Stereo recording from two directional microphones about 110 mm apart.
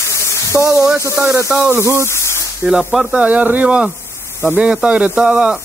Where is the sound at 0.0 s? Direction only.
25° left (ahead or behind).